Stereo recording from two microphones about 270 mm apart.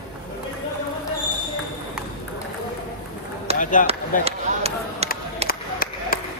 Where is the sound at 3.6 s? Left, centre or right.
Left.